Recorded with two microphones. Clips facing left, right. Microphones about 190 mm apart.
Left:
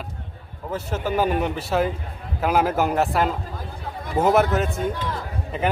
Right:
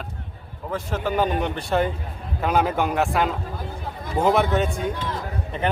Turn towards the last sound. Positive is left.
turn(degrees=5)  # may be behind; listen again after turning